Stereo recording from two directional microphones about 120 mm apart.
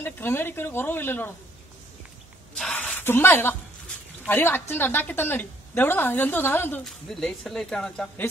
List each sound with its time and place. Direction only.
0.0 s a woman's voice: 20° left (ahead or behind)
2.5 s a sound: 5° left (ahead or behind)
2.8 s a woman's voice: 15° left (ahead or behind)
6.8 s speech: 5° left (ahead or behind)